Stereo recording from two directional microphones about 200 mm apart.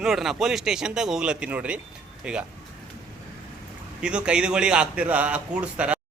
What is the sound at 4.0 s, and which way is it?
A man's voice, 5° right (ahead or behind).